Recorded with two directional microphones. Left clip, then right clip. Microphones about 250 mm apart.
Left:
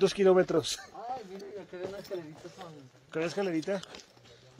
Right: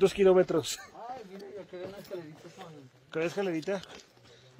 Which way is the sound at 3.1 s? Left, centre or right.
Centre.